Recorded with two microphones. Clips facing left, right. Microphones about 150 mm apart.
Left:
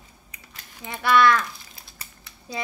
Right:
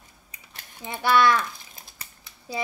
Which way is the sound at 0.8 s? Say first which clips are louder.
Left 1 dB; 25° right (ahead or behind).